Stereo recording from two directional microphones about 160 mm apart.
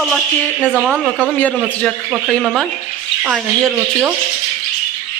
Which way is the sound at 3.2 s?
10° right (ahead or behind).